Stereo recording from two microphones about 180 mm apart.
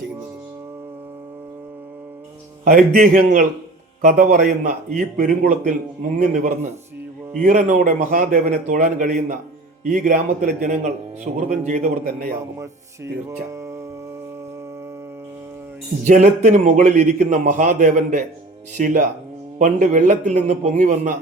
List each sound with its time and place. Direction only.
2.6 s a man's voice: 50° right (ahead or behind)
13.5 s music: 15° right (ahead or behind)
16.0 s a man's voice: 45° right (ahead or behind)